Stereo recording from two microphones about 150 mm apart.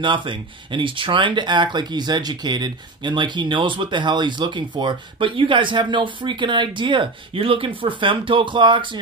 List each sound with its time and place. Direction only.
0.0 s speech: 35° right (ahead or behind)